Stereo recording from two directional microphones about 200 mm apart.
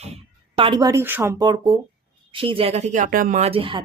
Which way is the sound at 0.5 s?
25° right (ahead or behind).